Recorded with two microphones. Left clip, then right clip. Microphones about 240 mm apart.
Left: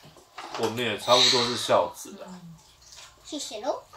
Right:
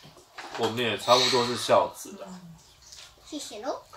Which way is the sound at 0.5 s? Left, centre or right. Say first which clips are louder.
Even; centre.